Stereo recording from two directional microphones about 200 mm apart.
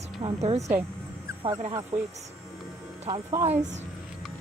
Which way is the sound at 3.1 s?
15° right (ahead or behind).